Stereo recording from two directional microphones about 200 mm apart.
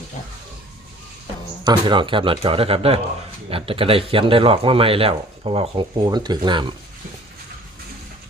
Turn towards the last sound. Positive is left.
turn(degrees=-25)  # may be behind; listen again after turning